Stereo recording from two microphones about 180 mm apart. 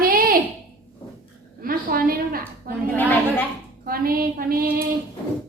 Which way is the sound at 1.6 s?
55° right (ahead or behind).